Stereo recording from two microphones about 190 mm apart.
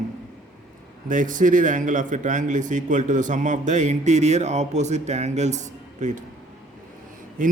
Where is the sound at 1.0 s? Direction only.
45° right (ahead or behind).